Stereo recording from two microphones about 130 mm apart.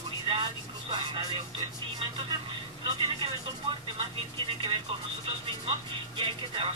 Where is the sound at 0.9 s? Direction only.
35° right (ahead or behind).